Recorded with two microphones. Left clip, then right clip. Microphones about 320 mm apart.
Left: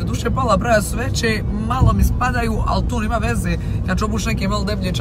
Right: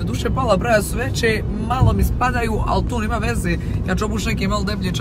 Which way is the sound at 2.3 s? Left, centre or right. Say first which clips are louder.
Even; centre.